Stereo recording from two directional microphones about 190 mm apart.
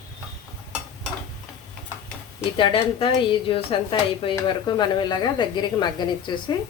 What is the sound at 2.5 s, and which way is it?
A woman's voice, 25° left (ahead or behind).